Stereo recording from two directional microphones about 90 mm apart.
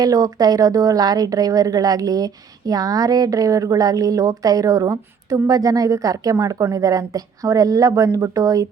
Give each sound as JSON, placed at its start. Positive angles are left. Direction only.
{"t": 0.0, "sound": "a woman's voice", "side_deg": -40}